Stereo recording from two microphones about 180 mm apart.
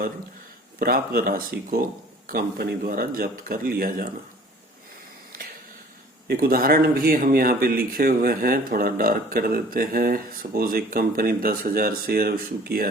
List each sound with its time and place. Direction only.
0.8 s speech: 55° right (ahead or behind)
5.4 s a sound: 55° right (ahead or behind)
6.2 s speech: 55° right (ahead or behind)